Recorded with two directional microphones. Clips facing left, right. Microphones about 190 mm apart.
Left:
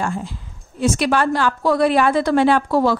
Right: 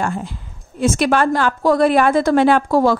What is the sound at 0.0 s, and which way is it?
A woman's voice, 60° right (ahead or behind).